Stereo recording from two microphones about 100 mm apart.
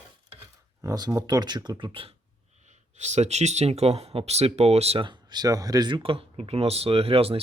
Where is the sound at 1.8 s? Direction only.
65° right (ahead or behind).